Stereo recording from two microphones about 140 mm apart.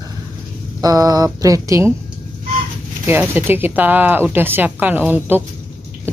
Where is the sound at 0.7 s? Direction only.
25° right (ahead or behind).